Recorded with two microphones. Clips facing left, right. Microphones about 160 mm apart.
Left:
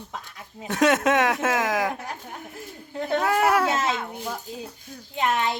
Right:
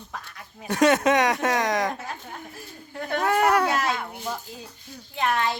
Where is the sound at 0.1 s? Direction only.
20° left (ahead or behind).